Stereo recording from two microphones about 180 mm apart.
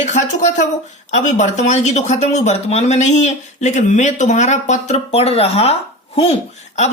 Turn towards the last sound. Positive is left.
turn(degrees=35)  # may be behind; listen again after turning